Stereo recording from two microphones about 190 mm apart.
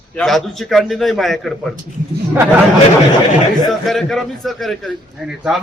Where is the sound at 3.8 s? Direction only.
Centre (ahead or behind).